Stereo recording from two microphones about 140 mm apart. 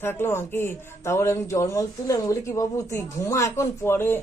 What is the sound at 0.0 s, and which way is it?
Speech, 15° left (ahead or behind).